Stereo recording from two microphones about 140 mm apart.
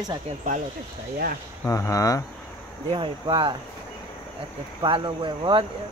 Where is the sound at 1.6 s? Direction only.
20° left (ahead or behind).